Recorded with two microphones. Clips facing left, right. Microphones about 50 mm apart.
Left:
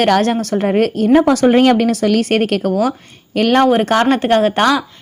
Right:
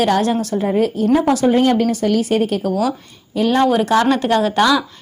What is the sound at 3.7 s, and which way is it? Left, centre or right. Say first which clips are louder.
Speech: left 2 dB; left.